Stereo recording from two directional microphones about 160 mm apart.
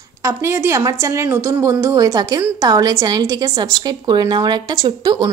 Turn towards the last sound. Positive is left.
turn(degrees=-25)  # may be behind; listen again after turning